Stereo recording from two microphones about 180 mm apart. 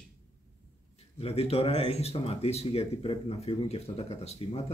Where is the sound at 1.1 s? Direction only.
35° left (ahead or behind).